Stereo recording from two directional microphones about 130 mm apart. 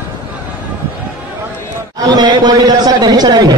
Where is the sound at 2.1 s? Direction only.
30° right (ahead or behind).